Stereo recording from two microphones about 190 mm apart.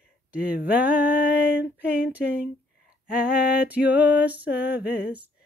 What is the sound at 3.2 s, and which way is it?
Speech, 50° left (ahead or behind).